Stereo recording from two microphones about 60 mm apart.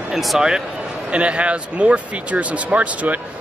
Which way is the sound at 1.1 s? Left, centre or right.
Centre.